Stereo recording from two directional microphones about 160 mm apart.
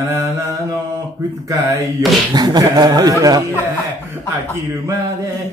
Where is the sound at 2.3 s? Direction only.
25° right (ahead or behind).